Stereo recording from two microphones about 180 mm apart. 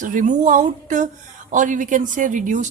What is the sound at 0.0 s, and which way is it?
A woman's voice, 45° right (ahead or behind).